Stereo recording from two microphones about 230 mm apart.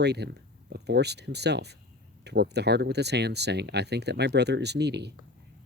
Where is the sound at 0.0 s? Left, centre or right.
Right.